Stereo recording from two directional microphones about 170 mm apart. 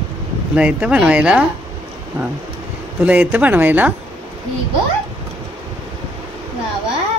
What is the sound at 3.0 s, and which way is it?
Speech, 10° right (ahead or behind).